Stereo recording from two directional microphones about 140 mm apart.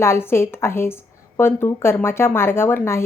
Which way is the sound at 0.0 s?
15° left (ahead or behind).